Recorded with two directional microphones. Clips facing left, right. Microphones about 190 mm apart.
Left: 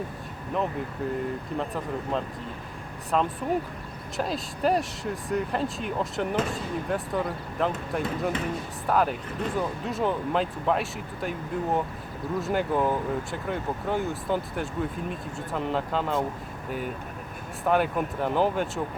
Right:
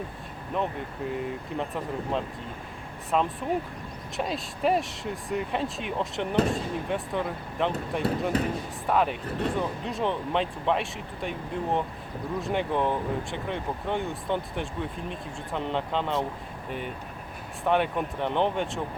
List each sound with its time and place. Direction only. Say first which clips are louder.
1.2 s speech: left 1 dB; centre (ahead or behind)
8.3 s speech: right 4 dB; 35° right (ahead or behind)
8.9 s speech: even; centre (ahead or behind)